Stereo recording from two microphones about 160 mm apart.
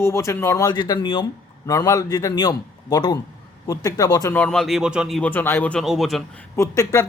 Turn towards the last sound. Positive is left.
turn(degrees=20)  # may be behind; listen again after turning